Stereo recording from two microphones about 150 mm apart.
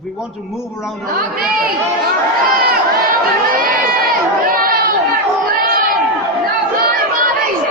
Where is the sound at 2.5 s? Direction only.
85° right.